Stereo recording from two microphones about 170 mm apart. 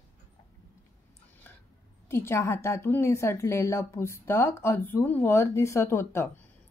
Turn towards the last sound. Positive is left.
turn(degrees=15)  # may be behind; listen again after turning